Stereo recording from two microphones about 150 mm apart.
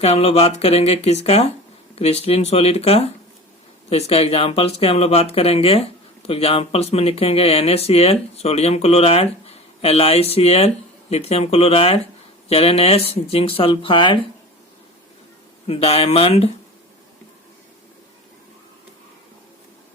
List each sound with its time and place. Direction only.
0.0 s speech: 45° left (ahead or behind)
15.6 s speech: 40° left (ahead or behind)